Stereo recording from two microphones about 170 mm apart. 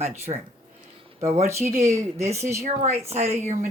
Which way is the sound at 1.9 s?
40° right (ahead or behind).